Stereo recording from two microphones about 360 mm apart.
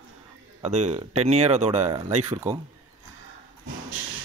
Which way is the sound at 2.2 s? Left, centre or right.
Centre.